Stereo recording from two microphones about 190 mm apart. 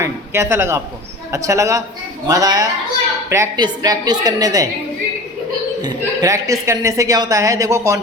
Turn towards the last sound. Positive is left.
turn(degrees=-15)  # may be behind; listen again after turning